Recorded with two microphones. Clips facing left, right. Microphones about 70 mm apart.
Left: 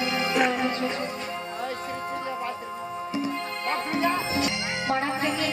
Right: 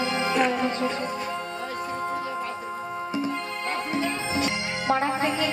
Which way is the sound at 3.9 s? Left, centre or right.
Left.